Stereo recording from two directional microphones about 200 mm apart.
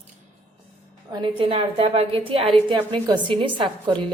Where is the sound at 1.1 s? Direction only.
25° right (ahead or behind).